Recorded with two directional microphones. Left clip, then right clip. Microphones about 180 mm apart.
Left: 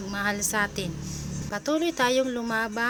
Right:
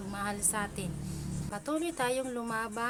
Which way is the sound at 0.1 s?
15° left (ahead or behind).